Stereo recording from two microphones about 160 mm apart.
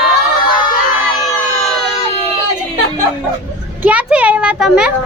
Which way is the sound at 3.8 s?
10° right (ahead or behind).